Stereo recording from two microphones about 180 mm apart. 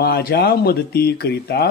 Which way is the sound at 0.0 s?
60° left (ahead or behind).